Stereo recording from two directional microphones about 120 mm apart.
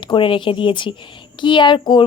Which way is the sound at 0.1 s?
45° left (ahead or behind).